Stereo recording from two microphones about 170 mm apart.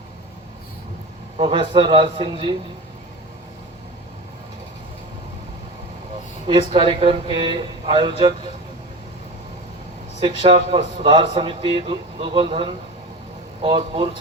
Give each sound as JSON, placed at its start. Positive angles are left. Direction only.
{"t": 1.4, "sound": "speech", "side_deg": -30}
{"t": 6.5, "sound": "speech", "side_deg": -30}
{"t": 10.2, "sound": "a man's voice", "side_deg": -35}